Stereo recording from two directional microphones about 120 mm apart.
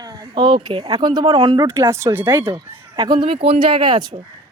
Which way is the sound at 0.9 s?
30° right (ahead or behind).